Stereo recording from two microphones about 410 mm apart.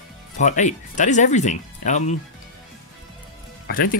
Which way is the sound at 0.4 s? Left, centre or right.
Centre.